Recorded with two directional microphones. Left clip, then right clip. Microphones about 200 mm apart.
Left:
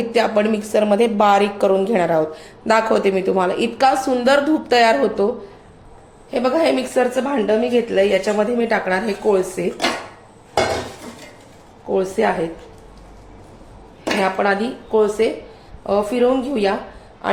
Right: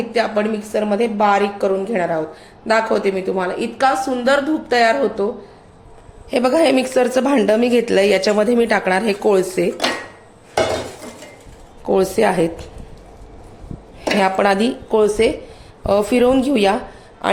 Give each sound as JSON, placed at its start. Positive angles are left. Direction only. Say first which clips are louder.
{"t": 0.1, "sound": "a woman's voice", "louder": "left 2 dB", "side_deg": 20}
{"t": 6.3, "sound": "speech", "louder": "right 3 dB", "side_deg": -40}
{"t": 11.9, "sound": "speech", "louder": "right 3 dB", "side_deg": -55}
{"t": 14.2, "sound": "speech", "louder": "right 3 dB", "side_deg": -60}
{"t": 17.2, "sound": "a sound", "louder": "right 2 dB", "side_deg": -45}